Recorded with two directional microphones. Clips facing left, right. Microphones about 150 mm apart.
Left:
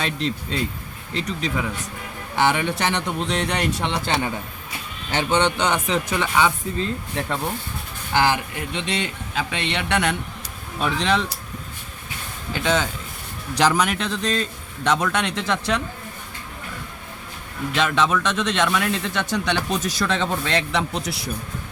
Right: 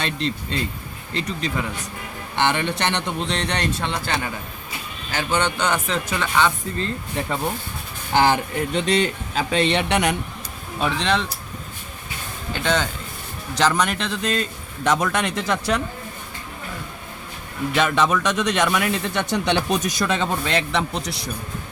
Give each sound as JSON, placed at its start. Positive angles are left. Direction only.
{"t": 0.0, "sound": "speech", "side_deg": 5}
{"t": 8.1, "sound": "speech", "side_deg": -40}
{"t": 9.9, "sound": "speech", "side_deg": -15}
{"t": 10.8, "sound": "speech", "side_deg": 0}
{"t": 12.5, "sound": "speech", "side_deg": 5}
{"t": 17.7, "sound": "speech", "side_deg": -5}